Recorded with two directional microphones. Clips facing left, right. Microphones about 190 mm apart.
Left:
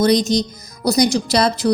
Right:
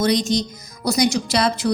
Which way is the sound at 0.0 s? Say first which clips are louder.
Left 4 dB; 40° left (ahead or behind).